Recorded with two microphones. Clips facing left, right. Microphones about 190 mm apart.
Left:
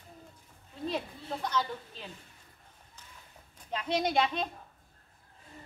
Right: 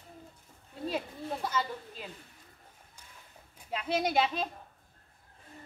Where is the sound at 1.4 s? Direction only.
5° right (ahead or behind).